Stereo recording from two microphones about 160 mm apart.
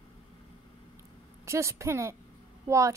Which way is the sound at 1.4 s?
20° right (ahead or behind).